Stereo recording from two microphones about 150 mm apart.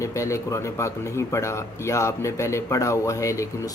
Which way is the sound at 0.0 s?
20° left (ahead or behind).